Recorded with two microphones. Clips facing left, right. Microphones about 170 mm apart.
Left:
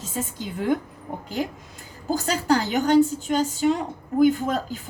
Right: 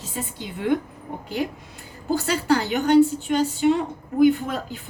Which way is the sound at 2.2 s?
40° left (ahead or behind).